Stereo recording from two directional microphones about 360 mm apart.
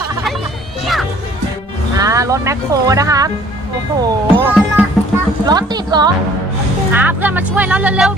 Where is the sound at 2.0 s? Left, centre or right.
Centre.